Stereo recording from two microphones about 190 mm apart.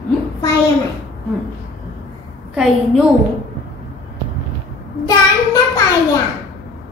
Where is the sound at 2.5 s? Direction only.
5° right (ahead or behind).